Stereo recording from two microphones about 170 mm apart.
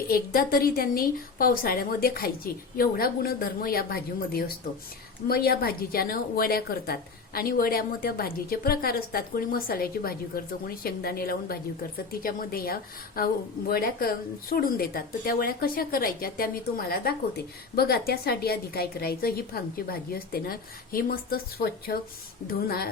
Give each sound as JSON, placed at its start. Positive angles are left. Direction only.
{"t": 0.1, "sound": "speech", "side_deg": 60}